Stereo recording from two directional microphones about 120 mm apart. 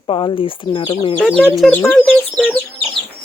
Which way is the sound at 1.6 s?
20° left (ahead or behind).